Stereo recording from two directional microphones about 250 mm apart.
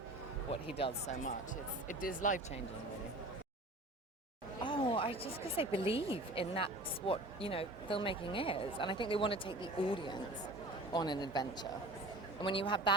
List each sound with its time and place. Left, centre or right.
0.8 s a woman's voice: left
4.6 s a woman's voice: centre